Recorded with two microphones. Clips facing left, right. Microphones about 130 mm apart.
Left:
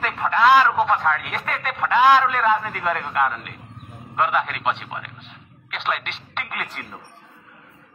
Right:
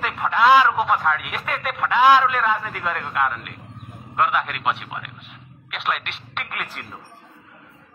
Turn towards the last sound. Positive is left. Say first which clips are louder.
# left 1 dB
turn(degrees=0)  # may be behind; listen again after turning